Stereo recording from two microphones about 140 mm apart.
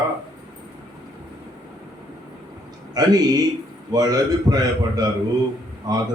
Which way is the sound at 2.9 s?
30° right (ahead or behind).